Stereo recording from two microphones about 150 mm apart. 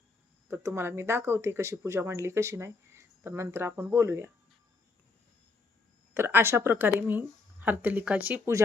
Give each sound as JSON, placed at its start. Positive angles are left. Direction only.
{"t": 0.4, "sound": "speech", "side_deg": -15}
{"t": 6.1, "sound": "speech", "side_deg": -15}